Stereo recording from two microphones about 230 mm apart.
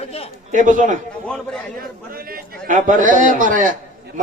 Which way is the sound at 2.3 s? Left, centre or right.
Right.